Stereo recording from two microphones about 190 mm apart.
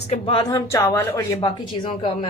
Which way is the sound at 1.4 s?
30° left (ahead or behind).